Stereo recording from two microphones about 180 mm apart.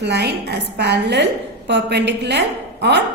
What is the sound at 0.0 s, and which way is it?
A woman's voice, 65° right (ahead or behind).